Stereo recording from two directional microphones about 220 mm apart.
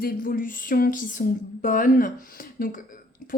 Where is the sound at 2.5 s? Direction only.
40° left (ahead or behind).